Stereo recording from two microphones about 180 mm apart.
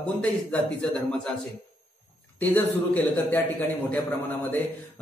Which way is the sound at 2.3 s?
10° left (ahead or behind).